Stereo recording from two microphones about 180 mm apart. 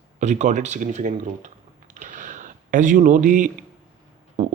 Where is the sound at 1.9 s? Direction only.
45° right (ahead or behind).